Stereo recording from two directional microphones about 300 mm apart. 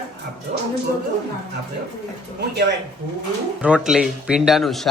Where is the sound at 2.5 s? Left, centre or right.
Right.